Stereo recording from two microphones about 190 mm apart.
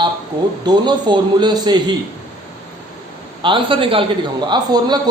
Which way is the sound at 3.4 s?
25° right (ahead or behind).